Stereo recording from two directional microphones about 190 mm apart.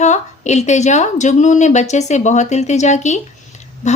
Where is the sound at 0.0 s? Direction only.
35° left (ahead or behind).